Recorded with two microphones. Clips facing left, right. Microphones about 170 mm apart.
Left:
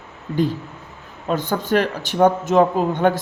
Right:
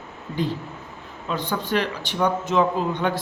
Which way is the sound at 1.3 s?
45° left (ahead or behind).